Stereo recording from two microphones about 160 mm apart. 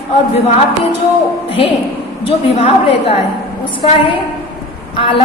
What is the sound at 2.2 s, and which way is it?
A woman's voice, 40° left (ahead or behind).